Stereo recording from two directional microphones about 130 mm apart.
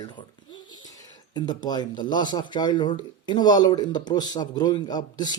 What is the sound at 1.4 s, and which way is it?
Speech, 30° left (ahead or behind).